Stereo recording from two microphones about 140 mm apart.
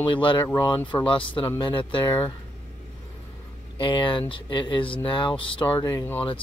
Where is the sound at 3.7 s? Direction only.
35° left (ahead or behind).